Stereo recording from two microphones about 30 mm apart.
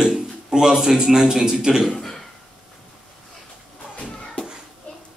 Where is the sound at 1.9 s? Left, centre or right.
Centre.